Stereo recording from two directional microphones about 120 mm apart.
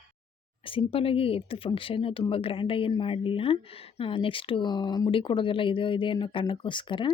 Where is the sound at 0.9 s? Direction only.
50° left (ahead or behind).